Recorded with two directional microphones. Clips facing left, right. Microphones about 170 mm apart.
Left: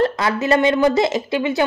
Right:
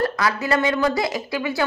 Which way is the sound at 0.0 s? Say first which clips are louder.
Left 4 dB; 25° left (ahead or behind).